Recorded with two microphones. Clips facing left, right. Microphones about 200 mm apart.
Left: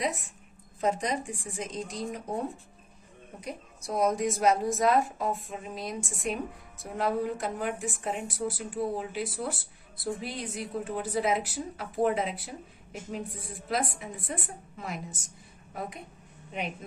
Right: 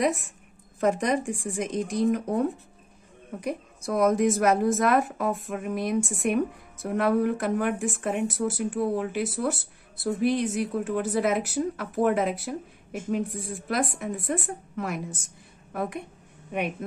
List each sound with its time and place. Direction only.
0.9 s a woman's voice: 60° right (ahead or behind)
11.2 s a woman's voice: 55° right (ahead or behind)